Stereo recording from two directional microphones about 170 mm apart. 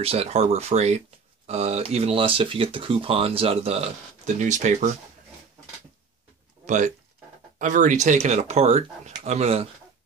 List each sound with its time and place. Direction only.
0.0 s speech: 35° right (ahead or behind)
6.6 s speech: 45° right (ahead or behind)